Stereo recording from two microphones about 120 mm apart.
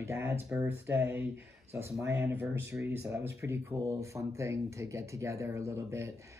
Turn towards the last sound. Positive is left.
turn(degrees=-25)  # may be behind; listen again after turning